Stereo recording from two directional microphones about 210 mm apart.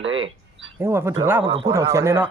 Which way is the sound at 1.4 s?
25° right (ahead or behind).